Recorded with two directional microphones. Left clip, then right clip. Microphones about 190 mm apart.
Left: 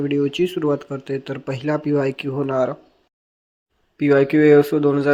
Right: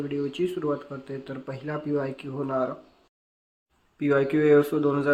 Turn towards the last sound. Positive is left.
turn(degrees=30)  # may be behind; listen again after turning